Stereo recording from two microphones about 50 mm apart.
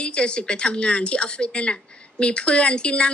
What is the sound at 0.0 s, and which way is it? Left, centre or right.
Speech, centre.